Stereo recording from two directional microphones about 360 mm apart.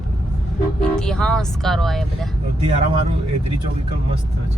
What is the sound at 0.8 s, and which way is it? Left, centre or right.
Speech, centre.